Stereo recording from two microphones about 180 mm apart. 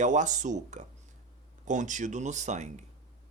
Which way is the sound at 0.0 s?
45° right (ahead or behind).